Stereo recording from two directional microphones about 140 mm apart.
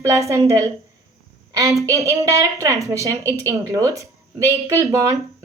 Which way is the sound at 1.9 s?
25° right (ahead or behind).